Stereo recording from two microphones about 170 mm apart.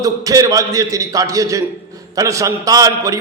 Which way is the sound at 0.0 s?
20° right (ahead or behind).